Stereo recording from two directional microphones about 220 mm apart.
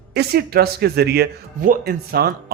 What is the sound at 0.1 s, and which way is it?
Speech, 45° right (ahead or behind).